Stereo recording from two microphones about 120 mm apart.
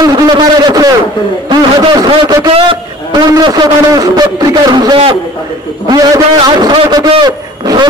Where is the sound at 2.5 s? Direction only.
50° right (ahead or behind).